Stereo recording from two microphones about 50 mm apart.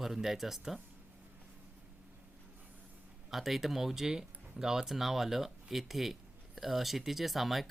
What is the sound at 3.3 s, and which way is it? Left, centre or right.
Speech, centre.